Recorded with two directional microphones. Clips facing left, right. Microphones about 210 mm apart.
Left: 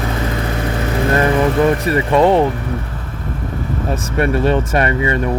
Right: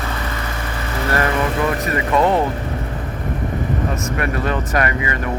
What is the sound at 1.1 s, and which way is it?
Vehicle, 20° left (ahead or behind).